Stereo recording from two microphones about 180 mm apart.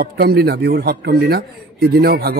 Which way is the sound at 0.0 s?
60° right (ahead or behind).